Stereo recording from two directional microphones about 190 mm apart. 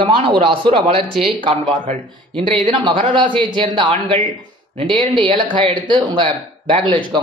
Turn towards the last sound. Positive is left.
turn(degrees=-25)  # may be behind; listen again after turning